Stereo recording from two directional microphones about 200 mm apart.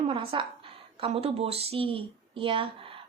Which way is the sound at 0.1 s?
25° right (ahead or behind).